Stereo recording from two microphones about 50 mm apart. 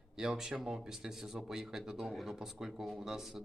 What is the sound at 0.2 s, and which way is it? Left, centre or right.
Speech, centre.